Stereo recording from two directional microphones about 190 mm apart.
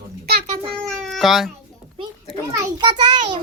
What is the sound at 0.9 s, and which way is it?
Speech, centre (ahead or behind).